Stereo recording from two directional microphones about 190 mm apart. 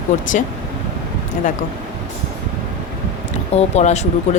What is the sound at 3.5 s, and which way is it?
Speech, 35° left (ahead or behind).